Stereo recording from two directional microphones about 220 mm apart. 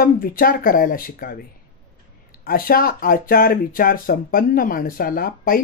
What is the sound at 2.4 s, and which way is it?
Speech, 40° left (ahead or behind).